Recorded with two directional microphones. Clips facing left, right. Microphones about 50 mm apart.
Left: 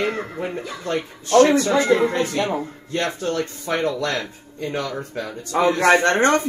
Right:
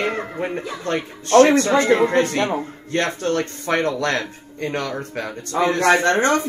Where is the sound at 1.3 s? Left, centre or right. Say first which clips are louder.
Right 2 dB; right.